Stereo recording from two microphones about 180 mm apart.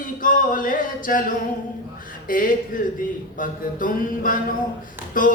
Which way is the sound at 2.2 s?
50° left (ahead or behind).